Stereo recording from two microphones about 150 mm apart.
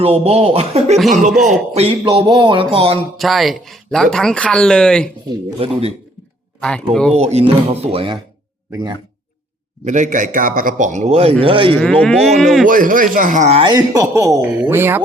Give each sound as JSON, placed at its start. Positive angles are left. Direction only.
{"t": 0.0, "sound": "speech", "side_deg": -40}
{"t": 1.3, "sound": "speech", "side_deg": 0}
{"t": 1.7, "sound": "speech", "side_deg": -40}
{"t": 2.2, "sound": "speech", "side_deg": -30}
{"t": 3.2, "sound": "speech", "side_deg": 0}
{"t": 5.5, "sound": "speech", "side_deg": -40}
{"t": 6.6, "sound": "speech", "side_deg": 5}
{"t": 7.2, "sound": "speech", "side_deg": -45}
{"t": 9.8, "sound": "a man's voice", "side_deg": -55}
{"t": 11.8, "sound": "speech", "side_deg": 10}
{"t": 12.6, "sound": "a man's voice", "side_deg": -65}
{"t": 13.6, "sound": "speech", "side_deg": -30}